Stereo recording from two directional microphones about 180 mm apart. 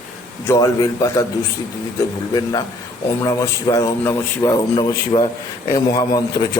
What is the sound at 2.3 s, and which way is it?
A man's voice, 20° left (ahead or behind).